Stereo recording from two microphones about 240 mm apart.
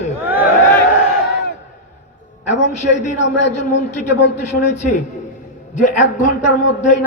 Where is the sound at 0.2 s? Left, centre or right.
Centre.